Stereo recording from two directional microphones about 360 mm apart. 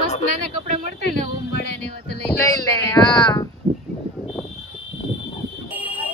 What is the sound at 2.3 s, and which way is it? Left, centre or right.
Speech, centre.